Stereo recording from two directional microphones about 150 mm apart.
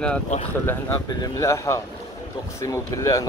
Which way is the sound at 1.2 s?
20° left (ahead or behind).